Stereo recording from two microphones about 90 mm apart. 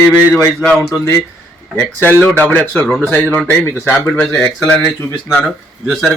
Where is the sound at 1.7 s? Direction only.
20° left (ahead or behind).